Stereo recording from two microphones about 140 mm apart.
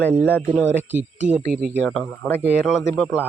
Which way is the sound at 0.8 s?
15° right (ahead or behind).